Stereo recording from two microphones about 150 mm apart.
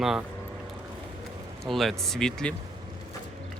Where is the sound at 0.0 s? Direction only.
5° right (ahead or behind).